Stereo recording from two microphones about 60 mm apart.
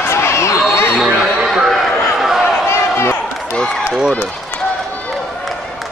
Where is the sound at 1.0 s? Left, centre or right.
Centre.